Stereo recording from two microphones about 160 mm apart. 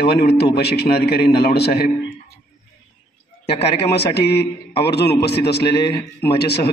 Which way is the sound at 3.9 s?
90° left.